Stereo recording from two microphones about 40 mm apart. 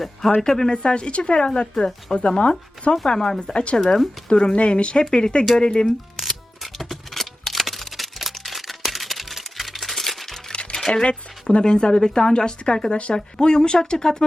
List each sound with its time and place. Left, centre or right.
0.0 s speech: centre
0.8 s speech: left
3.1 s speech: centre
3.4 s speech: left
6.2 s music: centre
10.5 s music: left
10.8 s speech: left
12.9 s speech: left
13.1 s speech: centre